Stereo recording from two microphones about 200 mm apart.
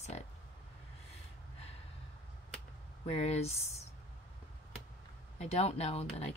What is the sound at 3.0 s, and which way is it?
Speech, 30° left (ahead or behind).